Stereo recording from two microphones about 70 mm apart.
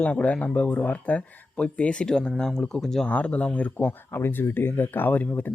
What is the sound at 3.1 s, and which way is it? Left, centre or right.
Speech, centre.